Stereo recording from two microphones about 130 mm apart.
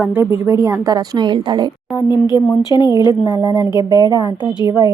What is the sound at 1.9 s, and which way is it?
Speech, 25° left (ahead or behind).